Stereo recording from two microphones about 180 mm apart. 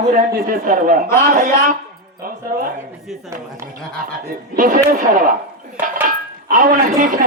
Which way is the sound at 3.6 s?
45° right (ahead or behind).